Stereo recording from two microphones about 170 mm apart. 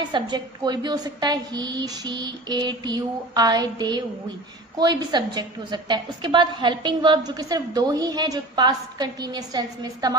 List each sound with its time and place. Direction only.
0.0 s a woman's voice: 25° right (ahead or behind)